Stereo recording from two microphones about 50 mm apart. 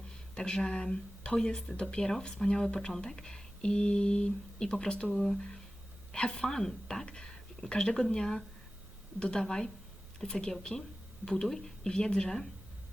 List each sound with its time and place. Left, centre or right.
0.3 s speech: centre
6.1 s a woman's voice: centre